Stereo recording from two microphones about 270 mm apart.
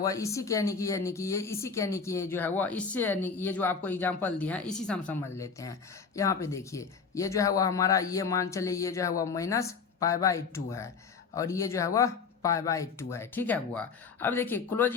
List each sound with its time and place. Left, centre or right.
0.0 s speech: centre